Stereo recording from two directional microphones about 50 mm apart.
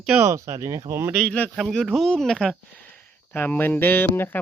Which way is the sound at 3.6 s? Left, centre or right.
Left.